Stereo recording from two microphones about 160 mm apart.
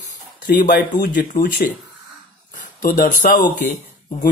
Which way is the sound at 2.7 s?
55° left (ahead or behind).